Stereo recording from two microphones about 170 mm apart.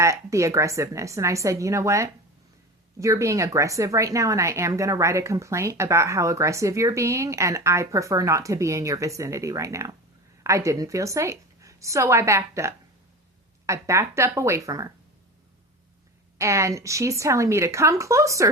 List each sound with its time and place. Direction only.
0.0 s speech: 15° right (ahead or behind)
16.4 s speech: 15° right (ahead or behind)